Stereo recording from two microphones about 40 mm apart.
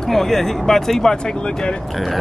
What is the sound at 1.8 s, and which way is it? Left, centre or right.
Speech, centre.